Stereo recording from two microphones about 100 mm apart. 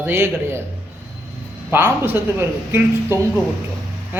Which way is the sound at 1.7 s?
25° right (ahead or behind).